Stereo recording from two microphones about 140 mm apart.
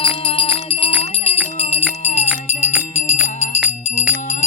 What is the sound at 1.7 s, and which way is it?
Jingle bell, 45° left (ahead or behind).